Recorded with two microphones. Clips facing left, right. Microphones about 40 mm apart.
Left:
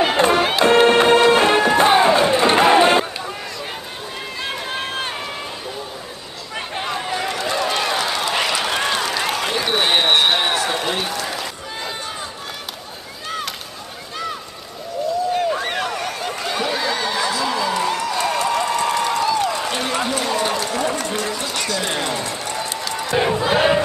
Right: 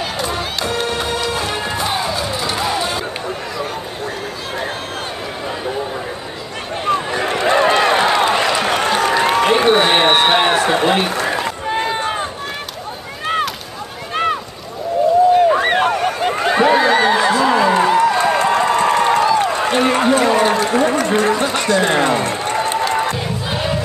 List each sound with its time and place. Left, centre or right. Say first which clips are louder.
0.0 s music: left 6 dB; left
6.9 s run: right 8 dB; right
7.2 s run: right 10 dB; right
9.9 s a sound: right 3 dB; right
10.3 s run: right 6 dB; right
15.5 s a sound: right 8 dB; right
23.5 s battle cry: left 5 dB; left